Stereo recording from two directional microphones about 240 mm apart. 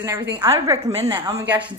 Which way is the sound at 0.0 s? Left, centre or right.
Centre.